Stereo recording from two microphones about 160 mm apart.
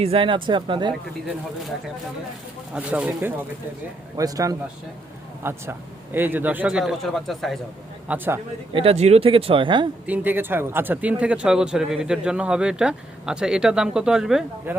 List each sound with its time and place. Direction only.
0.0 s speech: 35° right (ahead or behind)
2.7 s a man's voice: 10° right (ahead or behind)
4.2 s a man's voice: 20° right (ahead or behind); by 7.6 s centre (ahead or behind)
8.0 s a man's voice: 10° right (ahead or behind)
8.7 s speech: 35° right (ahead or behind)
10.1 s a man's voice: 10° right (ahead or behind)